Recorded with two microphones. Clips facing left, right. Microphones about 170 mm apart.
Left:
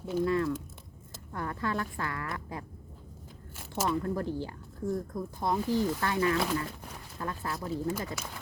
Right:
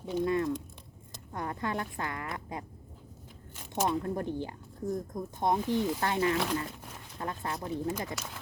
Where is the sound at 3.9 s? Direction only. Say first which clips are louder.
Left 2 dB; 25° right (ahead or behind).